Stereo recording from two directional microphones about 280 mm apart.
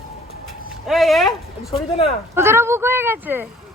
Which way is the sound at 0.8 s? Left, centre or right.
Centre.